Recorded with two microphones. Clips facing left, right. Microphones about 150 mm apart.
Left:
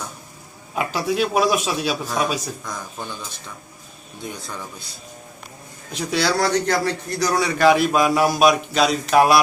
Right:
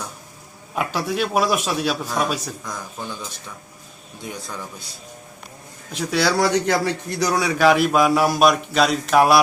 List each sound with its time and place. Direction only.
0.8 s a man's voice: centre (ahead or behind)
5.9 s a man's voice: centre (ahead or behind)